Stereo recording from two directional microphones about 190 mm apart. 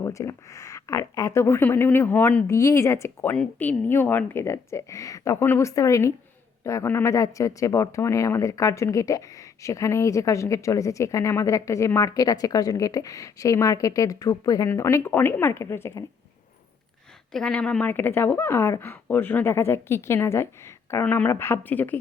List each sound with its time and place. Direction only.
0.0 s speech: 15° left (ahead or behind)
17.3 s speech: 5° left (ahead or behind)